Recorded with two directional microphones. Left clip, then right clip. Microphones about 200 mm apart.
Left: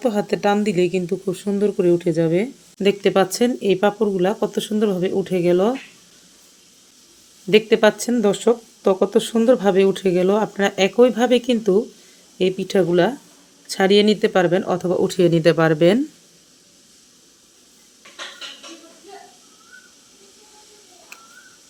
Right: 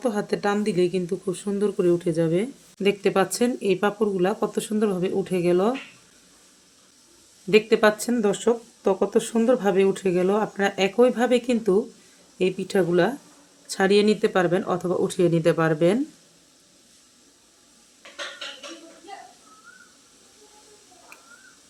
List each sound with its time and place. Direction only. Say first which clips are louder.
0.0 s speech: left 5 dB; 25° left (ahead or behind)
7.5 s speech: left 3 dB; 20° left (ahead or behind)